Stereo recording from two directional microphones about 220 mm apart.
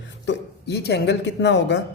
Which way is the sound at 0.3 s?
50° left (ahead or behind).